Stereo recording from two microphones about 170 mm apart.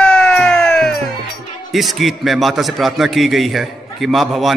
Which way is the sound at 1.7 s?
Centre (ahead or behind).